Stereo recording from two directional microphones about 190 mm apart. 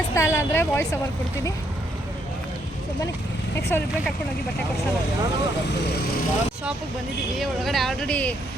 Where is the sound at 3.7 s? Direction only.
10° left (ahead or behind).